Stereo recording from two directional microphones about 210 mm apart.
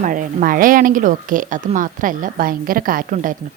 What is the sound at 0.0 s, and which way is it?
Speech, 40° right (ahead or behind).